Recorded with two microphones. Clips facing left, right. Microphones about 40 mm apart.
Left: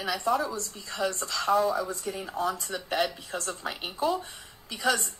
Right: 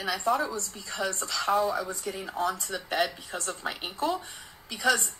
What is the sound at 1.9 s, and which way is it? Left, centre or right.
Speech, right.